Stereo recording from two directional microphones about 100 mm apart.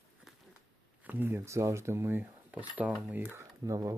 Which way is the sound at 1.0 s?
20° right (ahead or behind).